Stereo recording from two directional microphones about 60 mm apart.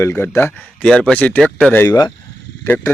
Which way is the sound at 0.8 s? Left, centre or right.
Centre.